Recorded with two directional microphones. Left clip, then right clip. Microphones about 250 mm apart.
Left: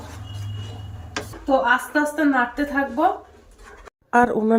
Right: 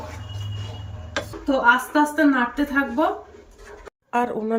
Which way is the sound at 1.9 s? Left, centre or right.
Centre.